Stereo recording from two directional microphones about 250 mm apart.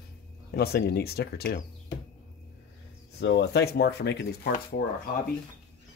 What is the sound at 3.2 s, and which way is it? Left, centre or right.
Speech, left.